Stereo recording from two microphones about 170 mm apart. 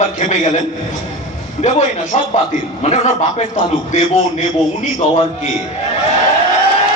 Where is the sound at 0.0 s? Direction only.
45° left (ahead or behind).